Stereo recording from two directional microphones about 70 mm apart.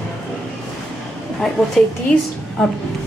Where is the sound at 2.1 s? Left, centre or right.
Left.